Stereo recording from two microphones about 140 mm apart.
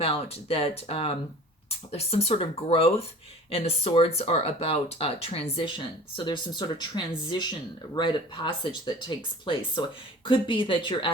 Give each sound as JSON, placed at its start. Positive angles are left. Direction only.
{"t": 0.0, "sound": "speech", "side_deg": 45}